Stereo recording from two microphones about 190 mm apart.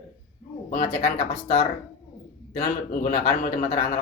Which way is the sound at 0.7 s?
40° left (ahead or behind).